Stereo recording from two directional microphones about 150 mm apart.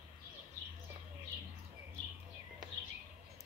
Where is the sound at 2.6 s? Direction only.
25° right (ahead or behind).